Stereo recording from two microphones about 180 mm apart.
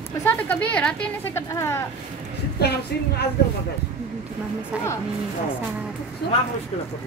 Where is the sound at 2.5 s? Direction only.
65° left (ahead or behind).